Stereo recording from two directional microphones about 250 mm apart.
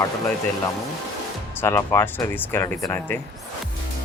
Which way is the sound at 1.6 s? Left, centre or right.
Centre.